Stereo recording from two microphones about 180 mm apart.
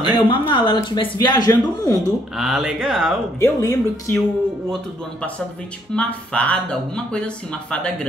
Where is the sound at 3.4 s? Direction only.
15° left (ahead or behind).